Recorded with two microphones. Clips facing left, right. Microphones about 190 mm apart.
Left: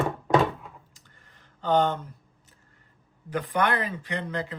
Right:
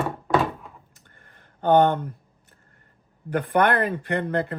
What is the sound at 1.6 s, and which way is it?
Speech, 55° right (ahead or behind).